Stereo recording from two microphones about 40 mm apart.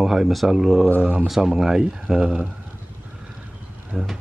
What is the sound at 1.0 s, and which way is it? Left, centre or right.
Speech, right.